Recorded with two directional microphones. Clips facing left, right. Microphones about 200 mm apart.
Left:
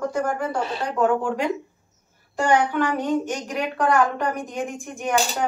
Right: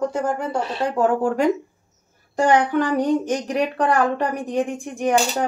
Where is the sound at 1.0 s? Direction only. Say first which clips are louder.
Right 2 dB; 40° right (ahead or behind).